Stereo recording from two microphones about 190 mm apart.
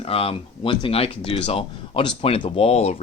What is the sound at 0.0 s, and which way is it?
Speech, 30° left (ahead or behind).